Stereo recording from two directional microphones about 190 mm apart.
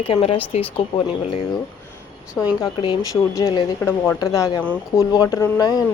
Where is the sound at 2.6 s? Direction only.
25° left (ahead or behind).